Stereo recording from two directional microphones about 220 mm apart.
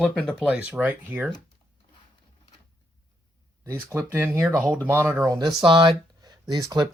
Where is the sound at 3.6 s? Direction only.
10° right (ahead or behind).